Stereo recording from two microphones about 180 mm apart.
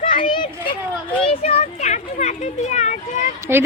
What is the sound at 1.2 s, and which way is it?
Children playing, 35° left (ahead or behind).